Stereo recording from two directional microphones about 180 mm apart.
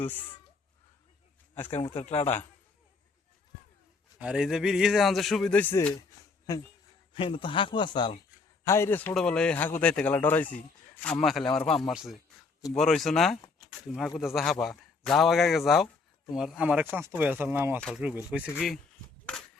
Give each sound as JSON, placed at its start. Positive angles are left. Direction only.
{"t": 0.0, "sound": "speech", "side_deg": 10}
{"t": 1.7, "sound": "a man's voice", "side_deg": 30}
{"t": 4.2, "sound": "a man's voice", "side_deg": -5}
{"t": 8.6, "sound": "speech", "side_deg": 15}
{"t": 17.7, "sound": "speech", "side_deg": 5}